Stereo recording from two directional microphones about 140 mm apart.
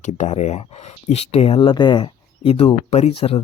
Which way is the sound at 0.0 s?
55° left (ahead or behind).